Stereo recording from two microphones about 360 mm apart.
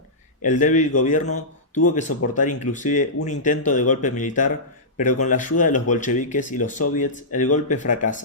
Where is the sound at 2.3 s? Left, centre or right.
Left.